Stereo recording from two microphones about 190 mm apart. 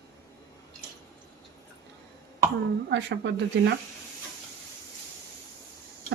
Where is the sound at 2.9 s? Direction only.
70° right (ahead or behind).